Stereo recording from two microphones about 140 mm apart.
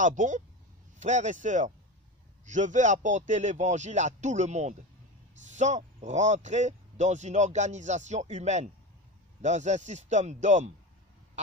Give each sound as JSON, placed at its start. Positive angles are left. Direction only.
{"t": 0.0, "sound": "speech", "side_deg": -65}